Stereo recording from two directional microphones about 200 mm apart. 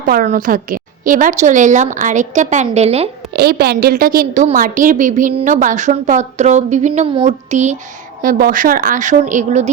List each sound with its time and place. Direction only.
0.1 s a woman's voice: 45° right (ahead or behind)
3.3 s a woman's voice: 50° right (ahead or behind); by 9.6 s 35° right (ahead or behind)